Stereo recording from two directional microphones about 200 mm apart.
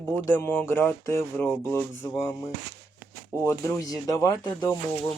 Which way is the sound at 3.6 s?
15° left (ahead or behind).